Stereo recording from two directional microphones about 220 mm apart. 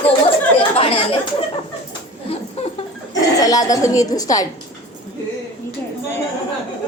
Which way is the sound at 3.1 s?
15° left (ahead or behind).